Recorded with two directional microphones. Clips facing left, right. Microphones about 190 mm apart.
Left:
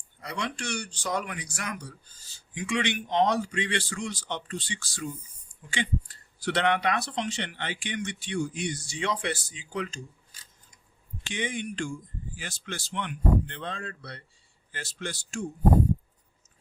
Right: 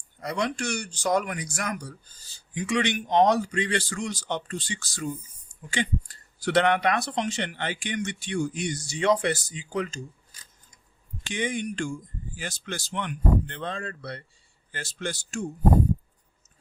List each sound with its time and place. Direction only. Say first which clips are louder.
0.2 s speech: right 6 dB; 40° right (ahead or behind)
11.2 s speech: right 3 dB; 45° right (ahead or behind)